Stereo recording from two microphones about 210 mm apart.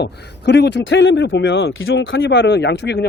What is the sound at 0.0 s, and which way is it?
Speech, 55° left (ahead or behind).